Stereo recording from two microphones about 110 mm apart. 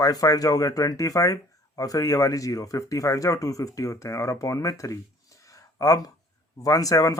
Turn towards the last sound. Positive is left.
turn(degrees=30)  # may be behind; listen again after turning